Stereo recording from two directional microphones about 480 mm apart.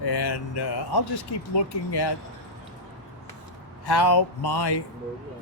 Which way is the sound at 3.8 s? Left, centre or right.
Left.